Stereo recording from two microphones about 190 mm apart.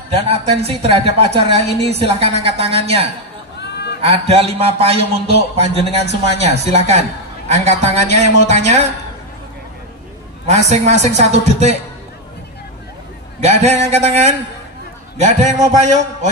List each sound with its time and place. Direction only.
0.1 s a man's voice: 35° right (ahead or behind)
10.7 s a man's voice: 35° right (ahead or behind)
13.4 s a man's voice: 35° right (ahead or behind)